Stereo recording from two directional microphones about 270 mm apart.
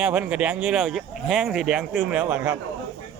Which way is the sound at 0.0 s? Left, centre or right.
Centre.